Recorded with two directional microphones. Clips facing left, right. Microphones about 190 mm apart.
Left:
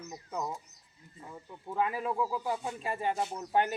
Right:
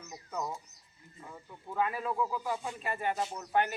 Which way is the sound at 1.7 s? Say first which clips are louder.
Left 1 dB; 15° left (ahead or behind).